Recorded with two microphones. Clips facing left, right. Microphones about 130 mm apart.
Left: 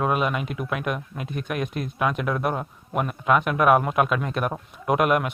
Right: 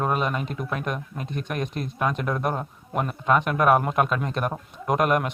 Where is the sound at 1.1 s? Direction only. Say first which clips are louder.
Left 1 dB; 35° right (ahead or behind).